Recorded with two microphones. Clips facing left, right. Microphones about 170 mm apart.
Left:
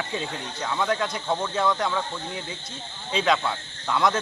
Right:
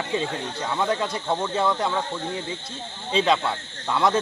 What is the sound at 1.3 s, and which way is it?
Speech, 10° right (ahead or behind).